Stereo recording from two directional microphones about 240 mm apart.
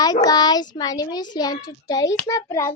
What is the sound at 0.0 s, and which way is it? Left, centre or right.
A child's voice, centre.